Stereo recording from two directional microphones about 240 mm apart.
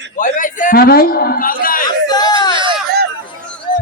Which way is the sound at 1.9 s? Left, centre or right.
Centre.